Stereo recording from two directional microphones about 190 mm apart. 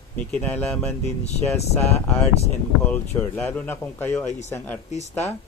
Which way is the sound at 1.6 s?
35° left (ahead or behind).